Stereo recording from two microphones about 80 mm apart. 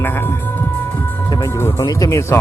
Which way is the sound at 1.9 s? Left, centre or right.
Left.